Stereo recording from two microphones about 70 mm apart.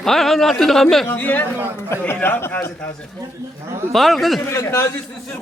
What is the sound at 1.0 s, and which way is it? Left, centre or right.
A man's voice, left.